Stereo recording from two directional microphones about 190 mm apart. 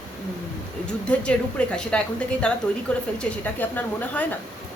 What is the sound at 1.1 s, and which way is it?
A woman's voice, 5° left (ahead or behind).